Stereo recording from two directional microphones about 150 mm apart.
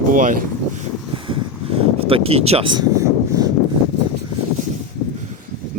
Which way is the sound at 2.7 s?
25° right (ahead or behind).